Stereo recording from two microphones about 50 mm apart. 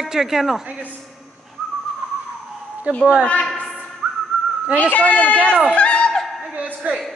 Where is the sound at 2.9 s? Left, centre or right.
Right.